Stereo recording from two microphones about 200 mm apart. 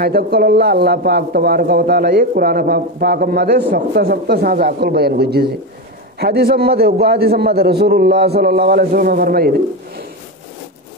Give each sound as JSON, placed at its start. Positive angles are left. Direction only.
{"t": 0.0, "sound": "a man's voice", "side_deg": -50}